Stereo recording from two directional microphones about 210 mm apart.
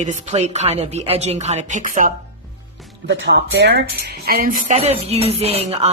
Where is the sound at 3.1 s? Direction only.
55° right (ahead or behind).